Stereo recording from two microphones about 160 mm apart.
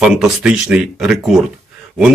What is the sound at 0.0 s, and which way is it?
Speech, centre (ahead or behind).